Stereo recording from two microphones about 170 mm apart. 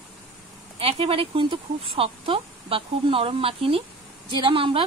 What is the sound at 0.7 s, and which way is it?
A woman's voice, 35° right (ahead or behind).